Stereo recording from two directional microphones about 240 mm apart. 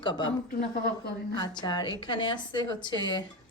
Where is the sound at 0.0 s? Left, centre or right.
Centre.